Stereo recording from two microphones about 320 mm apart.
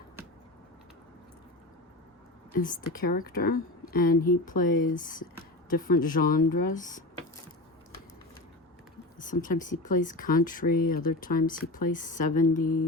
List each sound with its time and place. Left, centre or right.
2.5 s a woman's voice: left
9.1 s speech: left